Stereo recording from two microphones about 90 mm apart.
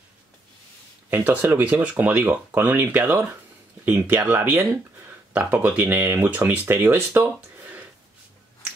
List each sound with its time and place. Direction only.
1.1 s speech: 20° right (ahead or behind)